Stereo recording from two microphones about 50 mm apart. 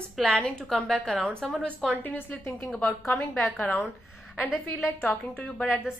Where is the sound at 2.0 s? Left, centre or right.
Left.